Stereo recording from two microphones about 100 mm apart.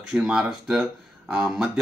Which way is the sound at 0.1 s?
10° right (ahead or behind).